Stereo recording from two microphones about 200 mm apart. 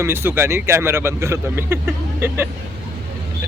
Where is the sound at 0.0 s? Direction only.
10° right (ahead or behind).